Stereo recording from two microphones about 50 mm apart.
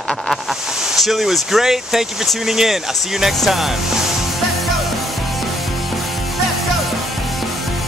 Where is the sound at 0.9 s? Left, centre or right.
Centre.